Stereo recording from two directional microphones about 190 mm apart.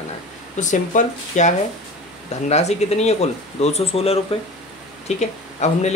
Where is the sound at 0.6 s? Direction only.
40° left (ahead or behind).